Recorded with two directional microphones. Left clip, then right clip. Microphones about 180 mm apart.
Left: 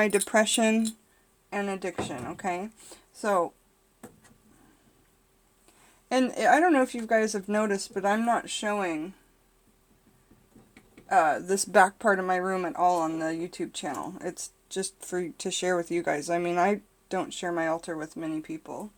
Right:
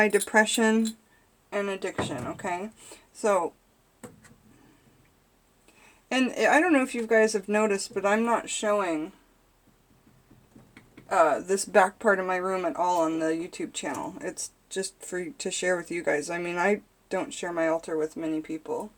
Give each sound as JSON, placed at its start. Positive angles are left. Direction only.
{"t": 0.0, "sound": "a woman's voice", "side_deg": 35}
{"t": 6.1, "sound": "speech", "side_deg": 30}
{"t": 11.1, "sound": "speech", "side_deg": 30}